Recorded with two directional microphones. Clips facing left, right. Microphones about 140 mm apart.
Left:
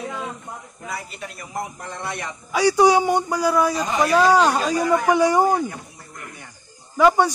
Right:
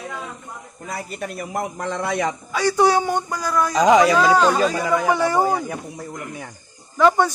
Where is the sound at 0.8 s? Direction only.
45° right (ahead or behind); by 2.1 s 90° right.